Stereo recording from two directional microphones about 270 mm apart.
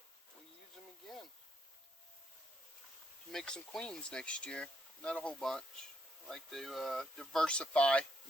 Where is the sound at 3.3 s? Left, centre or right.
Centre.